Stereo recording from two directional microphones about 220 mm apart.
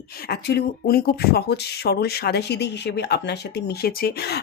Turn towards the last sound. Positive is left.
turn(degrees=45)  # may be behind; listen again after turning